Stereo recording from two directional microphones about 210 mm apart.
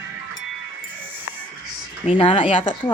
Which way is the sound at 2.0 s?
25° left (ahead or behind).